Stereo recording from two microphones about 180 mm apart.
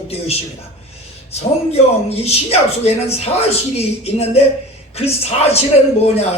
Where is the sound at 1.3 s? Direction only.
35° left (ahead or behind).